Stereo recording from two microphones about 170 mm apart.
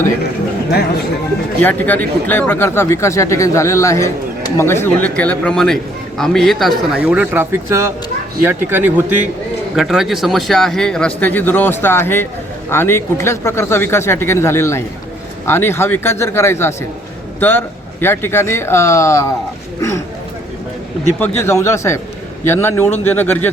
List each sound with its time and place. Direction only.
1.6 s speech: 10° left (ahead or behind)
21.2 s speech: 15° left (ahead or behind)